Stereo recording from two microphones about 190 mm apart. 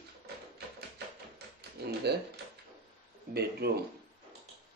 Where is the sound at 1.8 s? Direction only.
60° right (ahead or behind).